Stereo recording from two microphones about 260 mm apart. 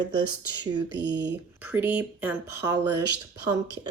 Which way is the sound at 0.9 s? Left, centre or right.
Right.